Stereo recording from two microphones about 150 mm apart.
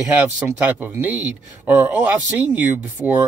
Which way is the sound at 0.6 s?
10° right (ahead or behind).